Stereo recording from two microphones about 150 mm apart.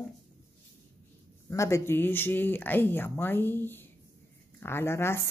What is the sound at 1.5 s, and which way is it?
Speech, 20° left (ahead or behind).